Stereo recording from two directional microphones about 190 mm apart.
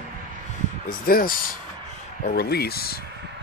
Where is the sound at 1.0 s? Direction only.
50° left (ahead or behind).